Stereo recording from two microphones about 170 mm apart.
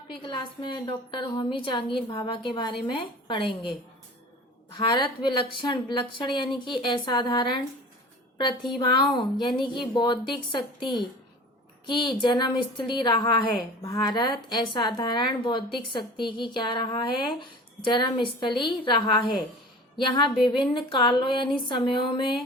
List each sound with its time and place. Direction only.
0.1 s a woman's voice: 30° left (ahead or behind)
4.7 s a woman's voice: 25° left (ahead or behind)
20.7 s a woman's voice: 30° left (ahead or behind)